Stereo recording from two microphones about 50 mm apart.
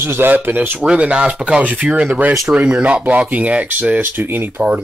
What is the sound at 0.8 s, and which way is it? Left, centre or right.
Speech, right.